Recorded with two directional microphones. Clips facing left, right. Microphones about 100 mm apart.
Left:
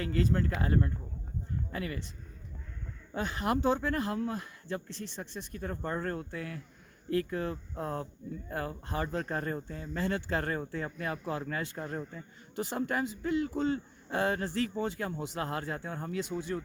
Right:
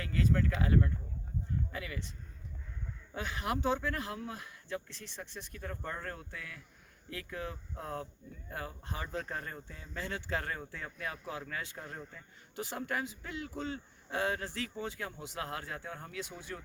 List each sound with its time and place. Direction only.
0.0 s speech: 40° left (ahead or behind)
3.2 s speech: 40° left (ahead or behind)